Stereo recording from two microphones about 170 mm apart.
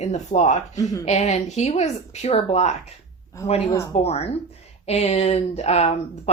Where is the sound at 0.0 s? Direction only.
40° left (ahead or behind).